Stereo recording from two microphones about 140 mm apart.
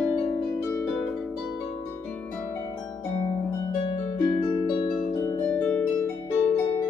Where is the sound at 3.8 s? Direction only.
35° left (ahead or behind).